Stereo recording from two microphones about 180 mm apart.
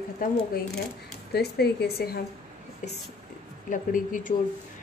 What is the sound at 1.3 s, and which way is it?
Speech, 65° left (ahead or behind).